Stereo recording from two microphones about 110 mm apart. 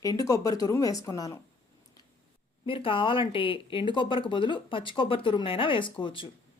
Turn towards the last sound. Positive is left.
turn(degrees=50)  # may be behind; listen again after turning